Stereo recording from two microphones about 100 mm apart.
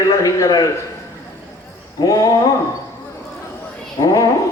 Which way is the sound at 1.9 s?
35° left (ahead or behind).